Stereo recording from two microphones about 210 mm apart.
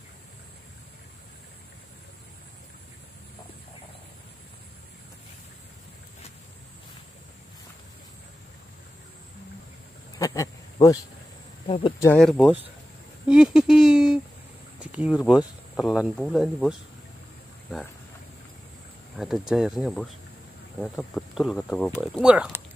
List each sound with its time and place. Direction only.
10.1 s a sound: 15° left (ahead or behind)
11.6 s speech: 25° left (ahead or behind)
12.0 s speech: 5° left (ahead or behind)
19.1 s speech: centre (ahead or behind)